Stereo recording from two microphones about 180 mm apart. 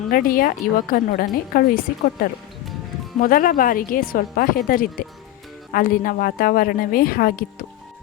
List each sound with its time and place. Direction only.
0.1 s a woman's voice: 50° left (ahead or behind)
3.2 s a woman's voice: 50° left (ahead or behind)